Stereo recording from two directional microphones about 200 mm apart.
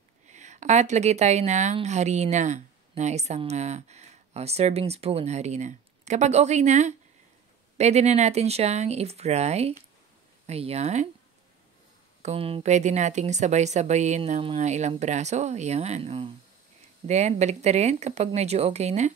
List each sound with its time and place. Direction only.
0.3 s a woman's voice: 35° right (ahead or behind)
12.2 s a woman's voice: 30° right (ahead or behind)